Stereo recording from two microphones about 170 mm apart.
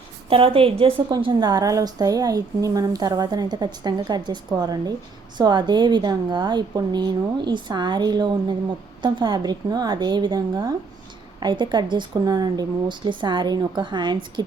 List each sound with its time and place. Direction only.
0.3 s a woman's voice: 35° right (ahead or behind)